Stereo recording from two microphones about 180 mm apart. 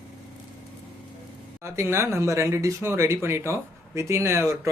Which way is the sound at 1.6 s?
15° right (ahead or behind).